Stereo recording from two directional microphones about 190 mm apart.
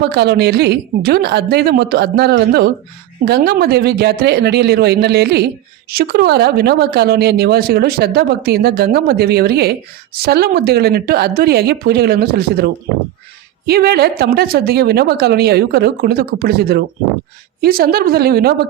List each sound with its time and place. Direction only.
0.0 s a woman's voice: 60° right (ahead or behind)